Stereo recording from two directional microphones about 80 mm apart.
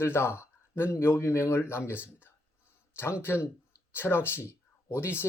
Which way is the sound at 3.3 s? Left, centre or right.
Left.